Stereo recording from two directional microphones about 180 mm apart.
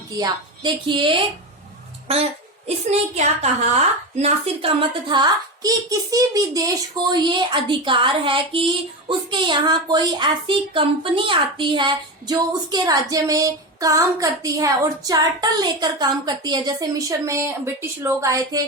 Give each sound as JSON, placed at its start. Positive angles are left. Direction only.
{"t": 0.2, "sound": "a woman's voice", "side_deg": -25}
{"t": 3.2, "sound": "a woman's voice", "side_deg": -40}